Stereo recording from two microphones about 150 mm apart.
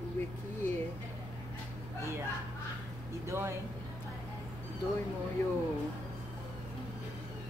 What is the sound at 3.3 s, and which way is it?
Speech, 20° right (ahead or behind).